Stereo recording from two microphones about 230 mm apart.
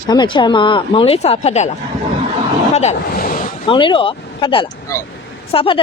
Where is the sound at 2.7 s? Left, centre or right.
Left.